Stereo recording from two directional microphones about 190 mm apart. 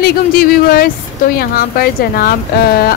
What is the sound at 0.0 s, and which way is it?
A woman's voice, 50° left (ahead or behind).